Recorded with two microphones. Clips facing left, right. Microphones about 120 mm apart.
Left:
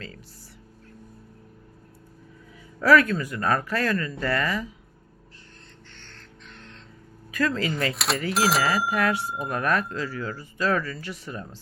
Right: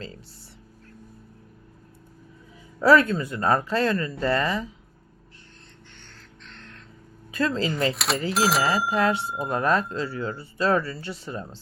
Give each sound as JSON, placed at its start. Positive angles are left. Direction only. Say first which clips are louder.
{"t": 2.8, "sound": "speech", "louder": "right 1 dB", "side_deg": -25}
{"t": 6.5, "sound": "music", "louder": "even", "side_deg": 15}
{"t": 7.3, "sound": "speech", "louder": "right 1 dB", "side_deg": -30}
{"t": 7.9, "sound": "speech", "louder": "right 1 dB", "side_deg": 0}
{"t": 8.9, "sound": "speech", "louder": "right 2 dB", "side_deg": -25}